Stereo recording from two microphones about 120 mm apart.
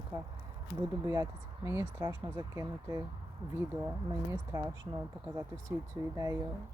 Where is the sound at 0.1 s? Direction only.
30° right (ahead or behind).